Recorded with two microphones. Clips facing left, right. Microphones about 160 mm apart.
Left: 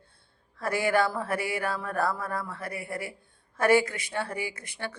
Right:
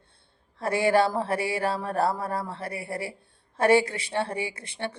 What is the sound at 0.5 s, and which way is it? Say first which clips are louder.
Speech: right 3 dB; 25° right (ahead or behind).